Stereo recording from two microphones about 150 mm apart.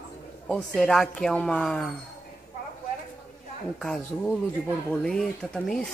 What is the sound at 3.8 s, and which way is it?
A man's voice, 5° left (ahead or behind).